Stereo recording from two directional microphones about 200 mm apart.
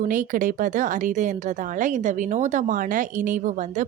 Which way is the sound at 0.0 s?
40° right (ahead or behind).